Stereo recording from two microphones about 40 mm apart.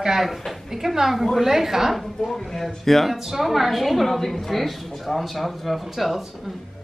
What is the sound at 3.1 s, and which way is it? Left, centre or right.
Speech, centre.